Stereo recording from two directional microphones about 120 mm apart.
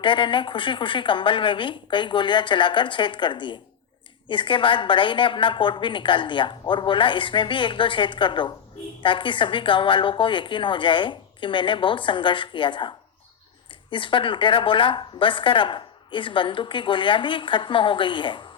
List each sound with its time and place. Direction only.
0.0 s a woman's voice: 45° left (ahead or behind)
13.9 s a woman's voice: 45° left (ahead or behind)